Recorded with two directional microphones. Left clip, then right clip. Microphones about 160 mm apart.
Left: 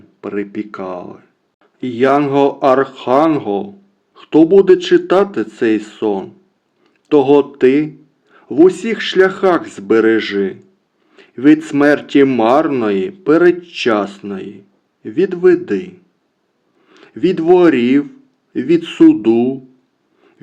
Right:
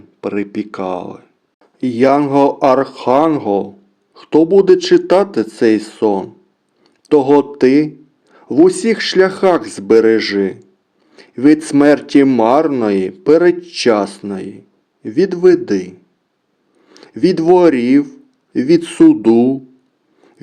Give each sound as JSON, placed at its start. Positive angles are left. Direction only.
{"t": 0.2, "sound": "speech", "side_deg": -40}